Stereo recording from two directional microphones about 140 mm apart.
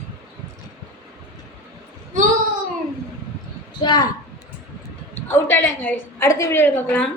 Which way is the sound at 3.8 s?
30° left (ahead or behind).